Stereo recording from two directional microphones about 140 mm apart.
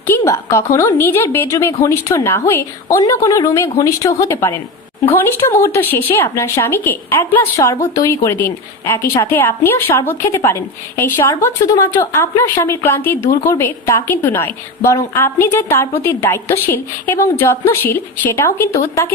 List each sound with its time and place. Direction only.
0.1 s a woman's voice: 20° left (ahead or behind)